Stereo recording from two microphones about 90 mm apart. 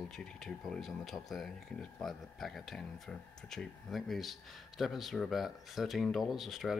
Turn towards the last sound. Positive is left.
turn(degrees=0)  # may be behind; listen again after turning